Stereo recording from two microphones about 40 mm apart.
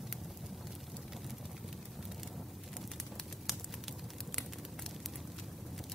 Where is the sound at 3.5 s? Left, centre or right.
Centre.